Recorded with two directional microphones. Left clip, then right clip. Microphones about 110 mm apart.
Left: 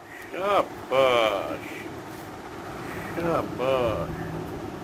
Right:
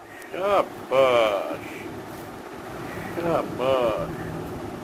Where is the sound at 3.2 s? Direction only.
15° left (ahead or behind).